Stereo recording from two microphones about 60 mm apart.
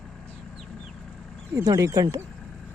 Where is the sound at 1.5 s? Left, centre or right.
Right.